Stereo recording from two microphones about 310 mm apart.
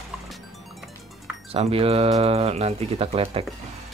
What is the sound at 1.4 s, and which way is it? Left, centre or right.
Speech, centre.